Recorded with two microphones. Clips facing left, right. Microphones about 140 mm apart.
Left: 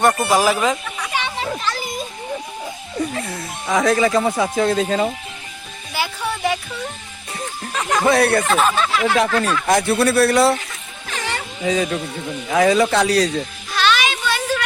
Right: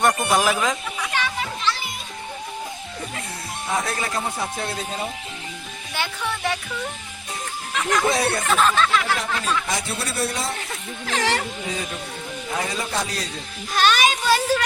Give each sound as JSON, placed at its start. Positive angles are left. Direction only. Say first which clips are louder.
{"t": 0.3, "sound": "speech", "louder": "left 4 dB", "side_deg": 0}
{"t": 1.1, "sound": "a sound", "louder": "left 2 dB", "side_deg": 25}
{"t": 1.6, "sound": "music", "louder": "left 1 dB", "side_deg": 45}
{"t": 3.7, "sound": "speech", "louder": "left 10 dB", "side_deg": 90}
{"t": 5.9, "sound": "music", "louder": "left 4 dB", "side_deg": 10}
{"t": 8.0, "sound": "speech", "louder": "left 6 dB", "side_deg": 65}
{"t": 8.5, "sound": "speech", "louder": "left 1 dB", "side_deg": 10}
{"t": 9.1, "sound": "speech", "louder": "left 7 dB", "side_deg": 70}
{"t": 11.1, "sound": "a sound", "louder": "right 4 dB", "side_deg": -90}
{"t": 11.6, "sound": "speech", "louder": "left 9 dB", "side_deg": 90}
{"t": 13.7, "sound": "a sound", "louder": "even", "side_deg": -45}